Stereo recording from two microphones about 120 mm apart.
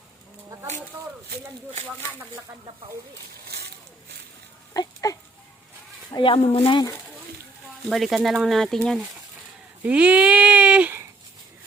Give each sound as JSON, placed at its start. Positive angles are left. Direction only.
{"t": 4.7, "sound": "goat", "side_deg": 30}
{"t": 6.1, "sound": "speech", "side_deg": 45}
{"t": 6.4, "sound": "speech", "side_deg": 55}
{"t": 7.9, "sound": "speech", "side_deg": 0}
{"t": 9.8, "sound": "speech", "side_deg": -10}